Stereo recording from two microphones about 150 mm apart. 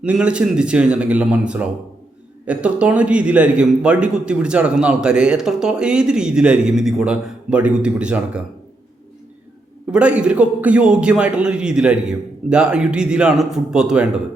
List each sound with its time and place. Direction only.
0.0 s a man's voice: 5° right (ahead or behind)
9.9 s a man's voice: 10° right (ahead or behind)